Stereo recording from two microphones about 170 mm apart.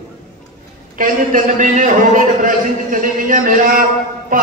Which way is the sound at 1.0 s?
50° right (ahead or behind).